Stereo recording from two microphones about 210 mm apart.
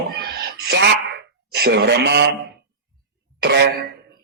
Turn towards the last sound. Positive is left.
turn(degrees=-50)  # may be behind; listen again after turning